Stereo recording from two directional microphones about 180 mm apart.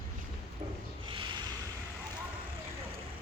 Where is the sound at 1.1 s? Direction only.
25° right (ahead or behind).